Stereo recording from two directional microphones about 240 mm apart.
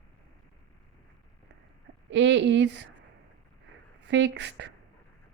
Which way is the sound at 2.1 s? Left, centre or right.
Right.